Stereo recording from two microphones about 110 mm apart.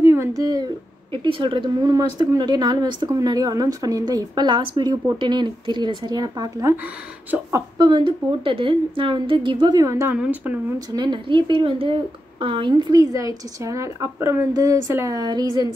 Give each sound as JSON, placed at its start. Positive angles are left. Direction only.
{"t": 0.0, "sound": "speech", "side_deg": -25}
{"t": 1.1, "sound": "a woman's voice", "side_deg": -50}
{"t": 7.7, "sound": "a woman's voice", "side_deg": -40}
{"t": 8.3, "sound": "a woman's voice", "side_deg": -55}
{"t": 9.8, "sound": "a woman's voice", "side_deg": -25}
{"t": 10.1, "sound": "a woman's voice", "side_deg": -10}
{"t": 11.0, "sound": "a woman's voice", "side_deg": -45}